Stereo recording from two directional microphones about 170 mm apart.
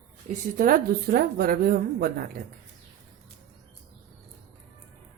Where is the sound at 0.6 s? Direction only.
55° right (ahead or behind).